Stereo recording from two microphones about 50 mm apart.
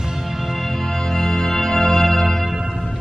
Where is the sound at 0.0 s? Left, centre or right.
Centre.